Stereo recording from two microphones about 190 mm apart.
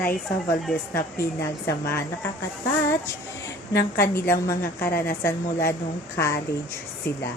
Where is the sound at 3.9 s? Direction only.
15° left (ahead or behind).